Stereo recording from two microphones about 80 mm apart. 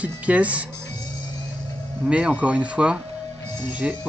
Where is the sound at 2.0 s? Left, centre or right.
Centre.